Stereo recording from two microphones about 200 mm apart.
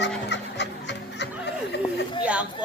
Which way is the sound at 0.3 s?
60° left (ahead or behind).